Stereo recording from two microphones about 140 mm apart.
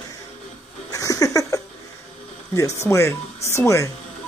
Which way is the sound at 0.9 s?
25° left (ahead or behind).